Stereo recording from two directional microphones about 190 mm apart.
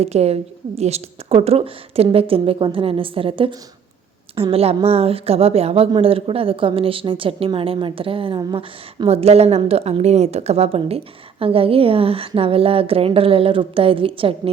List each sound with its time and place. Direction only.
0.0 s a woman's voice: 35° right (ahead or behind)